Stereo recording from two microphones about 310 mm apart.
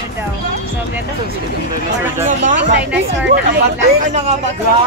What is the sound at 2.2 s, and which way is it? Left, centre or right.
Speech, right.